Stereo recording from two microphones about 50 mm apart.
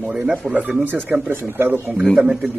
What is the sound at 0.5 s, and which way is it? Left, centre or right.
Speech, right.